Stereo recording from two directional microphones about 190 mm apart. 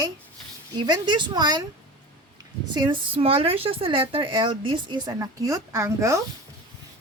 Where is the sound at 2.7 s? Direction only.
25° right (ahead or behind).